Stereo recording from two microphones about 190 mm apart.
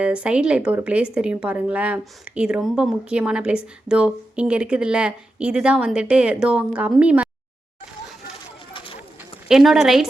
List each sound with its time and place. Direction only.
0.0 s speech: 5° right (ahead or behind)
8.7 s clip-clop: 30° left (ahead or behind)
9.5 s speech: centre (ahead or behind)